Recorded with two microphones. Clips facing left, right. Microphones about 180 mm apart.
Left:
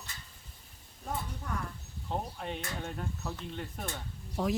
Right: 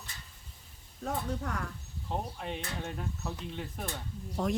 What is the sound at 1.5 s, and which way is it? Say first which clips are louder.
Speech: right 1 dB; 80° right.